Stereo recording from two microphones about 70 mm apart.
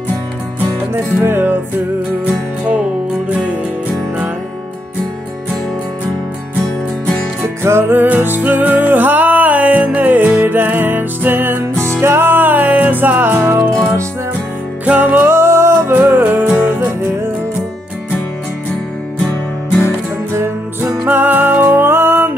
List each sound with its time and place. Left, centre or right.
0.9 s music: right
7.6 s music: right
14.9 s music: right
15.3 s music: right
16.0 s music: right
20.3 s music: right
21.0 s music: right